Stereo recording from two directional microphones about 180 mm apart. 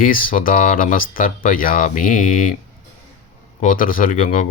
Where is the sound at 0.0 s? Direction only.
50° left (ahead or behind).